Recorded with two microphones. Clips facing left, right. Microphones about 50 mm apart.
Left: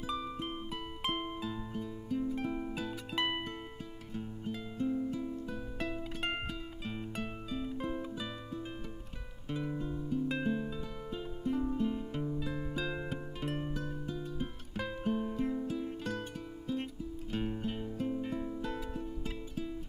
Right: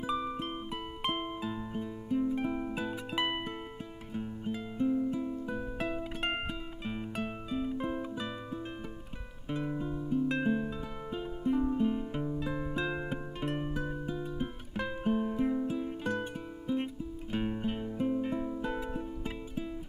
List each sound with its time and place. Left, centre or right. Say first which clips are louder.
0.0 s music: right 4 dB; centre
4.1 s music: right 4 dB; centre
9.5 s guitar: right 3 dB; centre
10.4 s music: right 3 dB; centre